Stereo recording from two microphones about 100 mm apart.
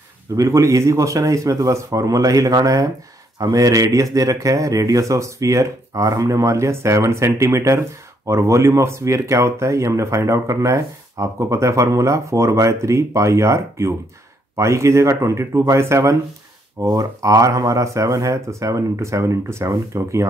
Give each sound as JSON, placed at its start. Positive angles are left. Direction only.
{"t": 0.4, "sound": "speech", "side_deg": -30}